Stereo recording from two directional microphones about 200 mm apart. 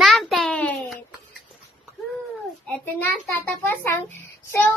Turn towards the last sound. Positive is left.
turn(degrees=10)  # may be behind; listen again after turning